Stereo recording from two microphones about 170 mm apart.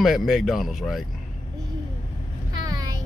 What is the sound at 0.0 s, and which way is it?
Speech, centre (ahead or behind).